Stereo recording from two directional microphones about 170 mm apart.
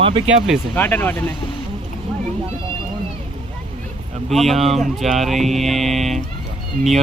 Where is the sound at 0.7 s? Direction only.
10° left (ahead or behind).